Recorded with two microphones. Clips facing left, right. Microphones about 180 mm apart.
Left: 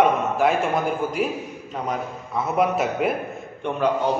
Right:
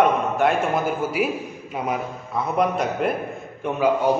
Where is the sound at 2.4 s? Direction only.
5° left (ahead or behind).